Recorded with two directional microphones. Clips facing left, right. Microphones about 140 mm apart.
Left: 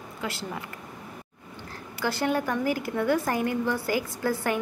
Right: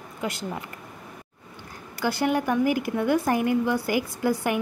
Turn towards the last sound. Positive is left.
turn(degrees=-15)  # may be behind; listen again after turning